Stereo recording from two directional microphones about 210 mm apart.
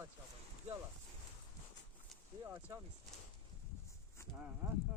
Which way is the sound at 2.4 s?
10° right (ahead or behind).